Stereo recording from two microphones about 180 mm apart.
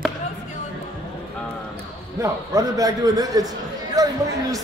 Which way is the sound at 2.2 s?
20° right (ahead or behind).